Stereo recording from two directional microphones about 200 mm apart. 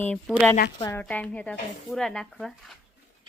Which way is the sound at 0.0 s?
5° left (ahead or behind).